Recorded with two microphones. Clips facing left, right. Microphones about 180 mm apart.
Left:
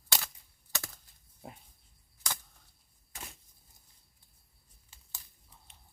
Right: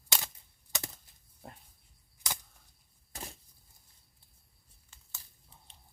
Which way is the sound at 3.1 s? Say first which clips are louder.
Right 3 dB; 35° right (ahead or behind).